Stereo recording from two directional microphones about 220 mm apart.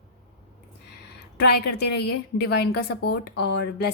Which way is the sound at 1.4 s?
50° left (ahead or behind).